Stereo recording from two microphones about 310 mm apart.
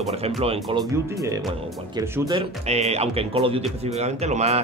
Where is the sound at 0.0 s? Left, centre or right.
Centre.